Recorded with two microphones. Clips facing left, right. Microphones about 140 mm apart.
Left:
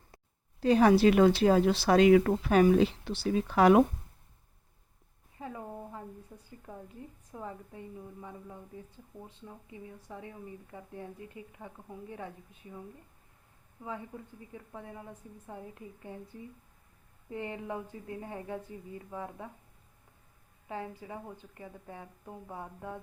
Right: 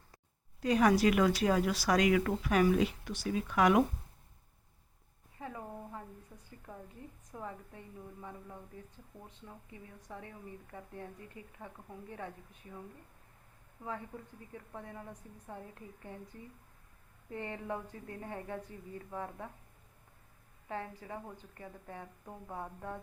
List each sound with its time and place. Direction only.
0.6 s a woman's voice: 30° left (ahead or behind)
5.4 s a sound: 20° left (ahead or behind)
6.7 s a woman's voice: 10° left (ahead or behind)
9.6 s a woman's voice: 20° left (ahead or behind)
14.7 s a woman's voice: 5° left (ahead or behind)
17.2 s a woman's voice: 15° left (ahead or behind)
20.7 s a woman's voice: 15° left (ahead or behind)